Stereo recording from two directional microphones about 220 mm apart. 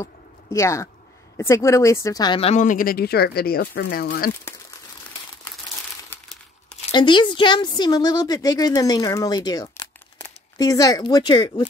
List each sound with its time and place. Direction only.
0.0 s a sound: 15° left (ahead or behind)
1.4 s speech: 15° left (ahead or behind); by 4.3 s 45° left (ahead or behind)
6.9 s a woman's voice: 20° left (ahead or behind)